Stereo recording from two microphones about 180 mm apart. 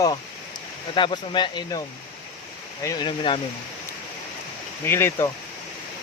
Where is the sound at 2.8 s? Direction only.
20° left (ahead or behind).